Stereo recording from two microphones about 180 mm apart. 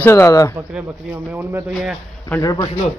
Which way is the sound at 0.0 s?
15° left (ahead or behind).